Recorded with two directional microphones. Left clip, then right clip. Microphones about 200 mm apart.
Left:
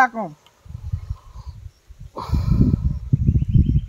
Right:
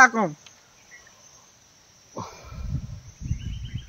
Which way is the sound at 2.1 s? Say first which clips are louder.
Left 8 dB; centre (ahead or behind).